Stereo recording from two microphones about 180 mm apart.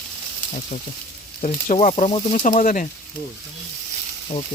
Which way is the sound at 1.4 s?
40° left (ahead or behind).